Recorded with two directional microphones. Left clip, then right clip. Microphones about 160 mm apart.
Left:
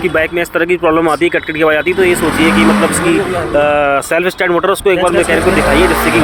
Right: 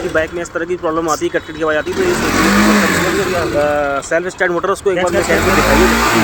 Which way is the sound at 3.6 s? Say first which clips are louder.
Left 7 dB; 35° left (ahead or behind).